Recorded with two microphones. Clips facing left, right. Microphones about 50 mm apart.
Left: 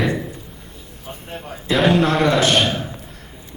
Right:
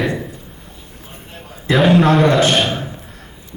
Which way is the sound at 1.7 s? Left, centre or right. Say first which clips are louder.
Right 3 dB; centre.